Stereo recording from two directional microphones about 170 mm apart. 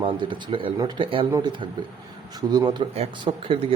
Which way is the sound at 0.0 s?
30° right (ahead or behind).